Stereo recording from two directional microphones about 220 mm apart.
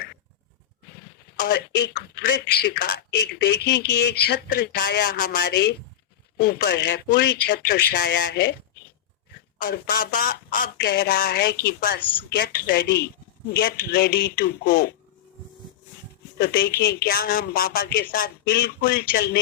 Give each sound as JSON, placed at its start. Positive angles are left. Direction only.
{"t": 1.4, "sound": "speech", "side_deg": 40}
{"t": 9.6, "sound": "speech", "side_deg": 40}
{"t": 16.4, "sound": "speech", "side_deg": 45}